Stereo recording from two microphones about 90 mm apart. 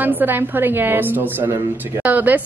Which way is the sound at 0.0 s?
20° right (ahead or behind).